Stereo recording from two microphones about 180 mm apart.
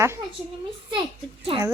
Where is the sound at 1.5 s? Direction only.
30° right (ahead or behind).